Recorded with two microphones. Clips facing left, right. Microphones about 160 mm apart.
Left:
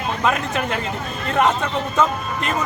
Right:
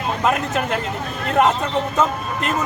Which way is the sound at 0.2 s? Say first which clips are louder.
Right 1 dB; 5° right (ahead or behind).